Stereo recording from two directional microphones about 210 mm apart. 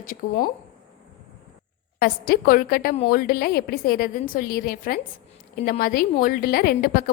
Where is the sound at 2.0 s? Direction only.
45° left (ahead or behind).